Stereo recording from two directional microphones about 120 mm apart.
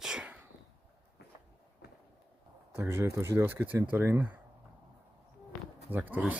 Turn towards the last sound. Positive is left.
turn(degrees=-15)  # may be behind; listen again after turning